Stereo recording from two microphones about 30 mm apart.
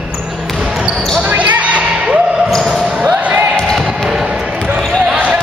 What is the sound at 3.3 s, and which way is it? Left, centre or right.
Basketball bounce, right.